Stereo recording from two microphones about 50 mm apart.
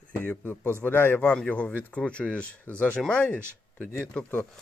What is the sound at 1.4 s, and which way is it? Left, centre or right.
Speech, left.